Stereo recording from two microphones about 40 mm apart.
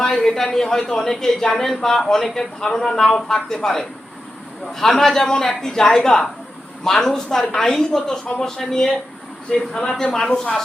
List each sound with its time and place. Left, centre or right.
0.0 s speech: centre